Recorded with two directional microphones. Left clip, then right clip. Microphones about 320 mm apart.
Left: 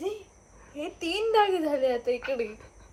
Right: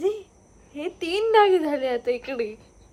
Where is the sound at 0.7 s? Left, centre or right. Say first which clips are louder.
Right 4 dB; right.